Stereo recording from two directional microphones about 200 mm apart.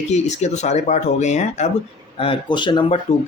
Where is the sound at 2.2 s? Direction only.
25° left (ahead or behind).